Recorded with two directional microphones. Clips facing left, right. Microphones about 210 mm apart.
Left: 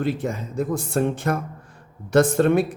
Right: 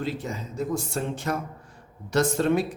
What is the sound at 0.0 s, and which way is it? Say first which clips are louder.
Speech: left 6 dB; 55° left (ahead or behind).